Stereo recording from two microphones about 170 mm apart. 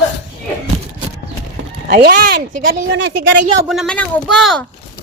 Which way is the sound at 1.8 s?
65° right (ahead or behind).